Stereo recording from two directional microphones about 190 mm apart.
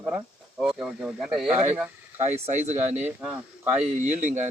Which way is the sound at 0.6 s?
5° right (ahead or behind).